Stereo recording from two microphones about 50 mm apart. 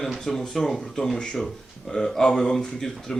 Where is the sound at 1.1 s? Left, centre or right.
Centre.